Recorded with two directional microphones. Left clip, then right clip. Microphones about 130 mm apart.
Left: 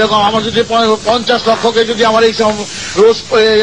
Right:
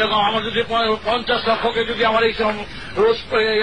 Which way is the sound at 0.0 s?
30° right (ahead or behind).